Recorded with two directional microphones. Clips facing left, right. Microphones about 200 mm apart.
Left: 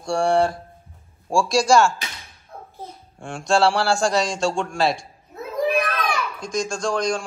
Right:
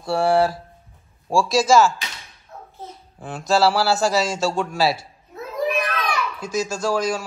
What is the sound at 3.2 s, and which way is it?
A man's voice, 5° right (ahead or behind).